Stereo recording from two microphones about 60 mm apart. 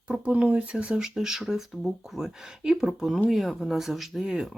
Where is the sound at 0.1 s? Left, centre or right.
Centre.